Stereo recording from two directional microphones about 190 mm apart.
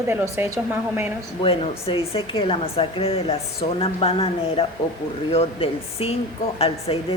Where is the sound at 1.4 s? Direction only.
30° left (ahead or behind).